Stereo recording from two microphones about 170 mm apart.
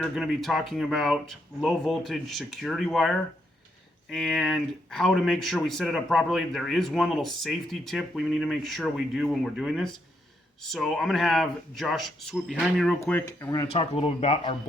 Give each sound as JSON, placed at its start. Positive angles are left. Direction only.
{"t": 0.0, "sound": "speech", "side_deg": 0}
{"t": 13.0, "sound": "speech", "side_deg": 15}
{"t": 13.7, "sound": "speech", "side_deg": 35}